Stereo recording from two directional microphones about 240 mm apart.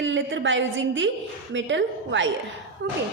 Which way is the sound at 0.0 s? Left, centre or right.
Right.